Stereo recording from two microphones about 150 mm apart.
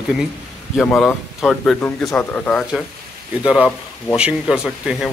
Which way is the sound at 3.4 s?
10° right (ahead or behind).